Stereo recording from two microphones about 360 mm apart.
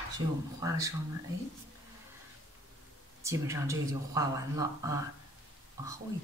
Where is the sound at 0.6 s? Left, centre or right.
Centre.